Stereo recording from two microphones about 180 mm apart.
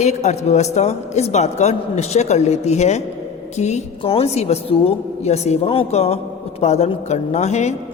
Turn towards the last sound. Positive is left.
turn(degrees=40)  # may be behind; listen again after turning